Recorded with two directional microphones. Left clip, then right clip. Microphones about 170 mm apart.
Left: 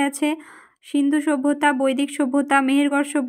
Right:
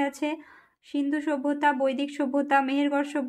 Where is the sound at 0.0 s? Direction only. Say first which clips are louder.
Left 6 dB; 30° left (ahead or behind).